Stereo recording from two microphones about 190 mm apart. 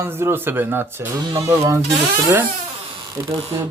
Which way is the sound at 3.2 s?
15° right (ahead or behind).